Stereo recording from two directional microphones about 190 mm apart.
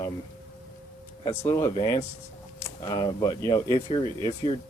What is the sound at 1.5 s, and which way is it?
Speech, 15° left (ahead or behind).